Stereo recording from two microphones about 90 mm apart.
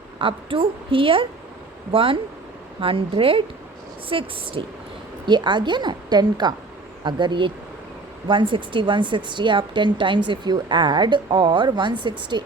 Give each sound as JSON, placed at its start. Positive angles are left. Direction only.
{"t": 0.2, "sound": "a woman's voice", "side_deg": -75}
{"t": 5.2, "sound": "a woman's voice", "side_deg": -55}